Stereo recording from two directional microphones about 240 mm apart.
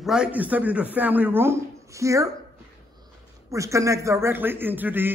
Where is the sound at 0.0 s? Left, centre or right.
Centre.